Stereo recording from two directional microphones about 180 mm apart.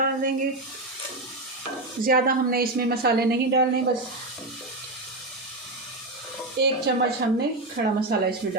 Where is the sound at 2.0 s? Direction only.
55° right (ahead or behind).